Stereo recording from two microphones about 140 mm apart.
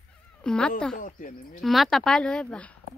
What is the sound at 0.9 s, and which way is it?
Speech, 70° left (ahead or behind).